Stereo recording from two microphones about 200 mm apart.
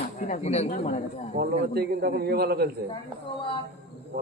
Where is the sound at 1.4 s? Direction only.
50° right (ahead or behind).